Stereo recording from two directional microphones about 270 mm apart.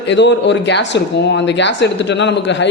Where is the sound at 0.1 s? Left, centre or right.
Left.